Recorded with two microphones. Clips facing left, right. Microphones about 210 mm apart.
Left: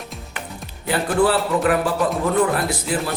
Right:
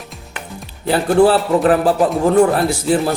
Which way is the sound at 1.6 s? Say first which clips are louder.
Right 5 dB; 30° right (ahead or behind).